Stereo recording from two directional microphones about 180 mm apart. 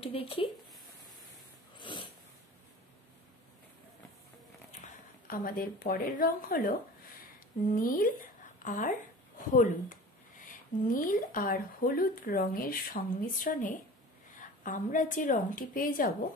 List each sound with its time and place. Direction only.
0.0 s speech: 30° left (ahead or behind)
1.8 s snort: 25° left (ahead or behind)
4.8 s a woman's voice: 50° left (ahead or behind)